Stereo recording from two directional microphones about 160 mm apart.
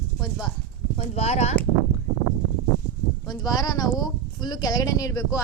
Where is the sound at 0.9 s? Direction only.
45° left (ahead or behind).